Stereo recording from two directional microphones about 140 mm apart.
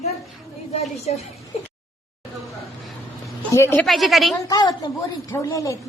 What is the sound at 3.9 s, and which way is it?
Speech, centre (ahead or behind).